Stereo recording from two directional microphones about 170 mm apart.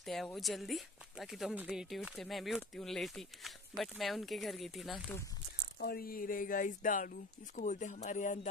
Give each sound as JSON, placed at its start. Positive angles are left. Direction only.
{"t": 0.0, "sound": "speech", "side_deg": 0}
{"t": 5.8, "sound": "speech", "side_deg": 60}